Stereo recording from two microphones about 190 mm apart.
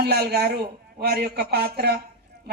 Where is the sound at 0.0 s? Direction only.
55° right (ahead or behind).